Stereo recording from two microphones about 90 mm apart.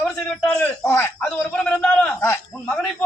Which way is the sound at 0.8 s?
30° left (ahead or behind).